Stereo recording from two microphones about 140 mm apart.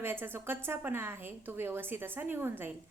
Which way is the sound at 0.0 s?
15° right (ahead or behind).